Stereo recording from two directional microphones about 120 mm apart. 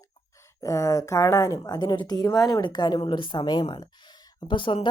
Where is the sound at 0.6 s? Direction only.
25° left (ahead or behind).